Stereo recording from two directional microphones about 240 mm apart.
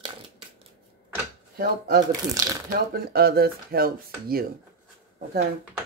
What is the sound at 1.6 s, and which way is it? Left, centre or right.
Speech, right.